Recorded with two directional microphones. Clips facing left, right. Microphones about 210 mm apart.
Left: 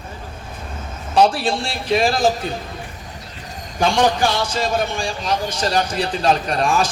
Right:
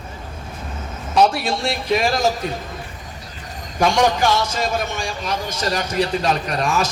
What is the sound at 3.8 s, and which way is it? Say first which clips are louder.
A man's voice: even; 30° left (ahead or behind).